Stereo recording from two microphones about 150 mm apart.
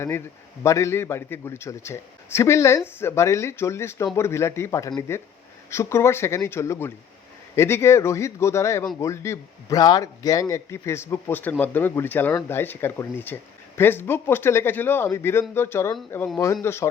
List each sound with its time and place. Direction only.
0.6 s a man's voice: 20° left (ahead or behind)